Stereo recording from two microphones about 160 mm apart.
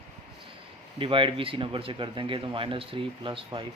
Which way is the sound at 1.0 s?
30° right (ahead or behind).